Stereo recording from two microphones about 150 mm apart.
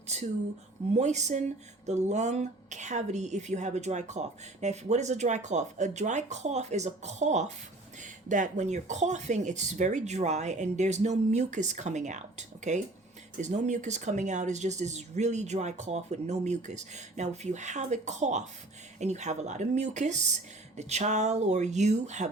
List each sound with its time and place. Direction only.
0.9 s a woman's voice: 50° right (ahead or behind)